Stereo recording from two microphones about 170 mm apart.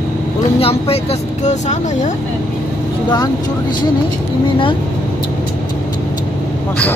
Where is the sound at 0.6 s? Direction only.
35° left (ahead or behind).